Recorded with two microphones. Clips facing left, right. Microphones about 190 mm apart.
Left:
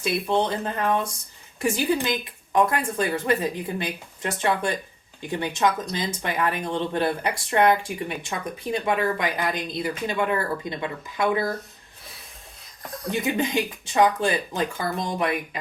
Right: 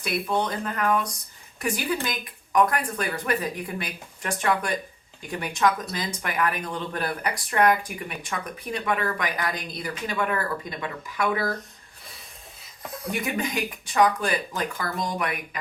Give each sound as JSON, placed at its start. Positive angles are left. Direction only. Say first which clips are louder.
{"t": 0.0, "sound": "speech", "louder": "left 3 dB", "side_deg": 25}
{"t": 13.1, "sound": "speech", "louder": "left 4 dB", "side_deg": 25}